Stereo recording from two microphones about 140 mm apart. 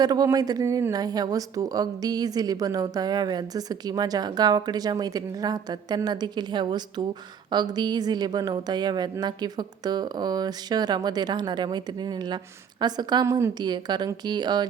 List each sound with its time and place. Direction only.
0.0 s a woman's voice: 25° right (ahead or behind)